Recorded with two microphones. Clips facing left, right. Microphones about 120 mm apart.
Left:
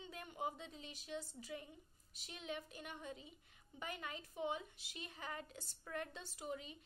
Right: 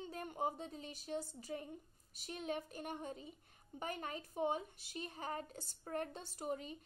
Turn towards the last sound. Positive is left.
turn(degrees=-45)  # may be behind; listen again after turning